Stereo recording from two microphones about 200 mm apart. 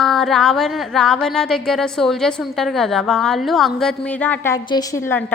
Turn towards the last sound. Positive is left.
turn(degrees=15)  # may be behind; listen again after turning